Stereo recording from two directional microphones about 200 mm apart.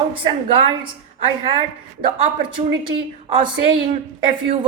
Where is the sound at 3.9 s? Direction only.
30° right (ahead or behind).